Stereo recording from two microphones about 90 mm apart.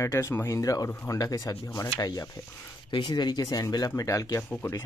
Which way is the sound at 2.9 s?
60° left (ahead or behind).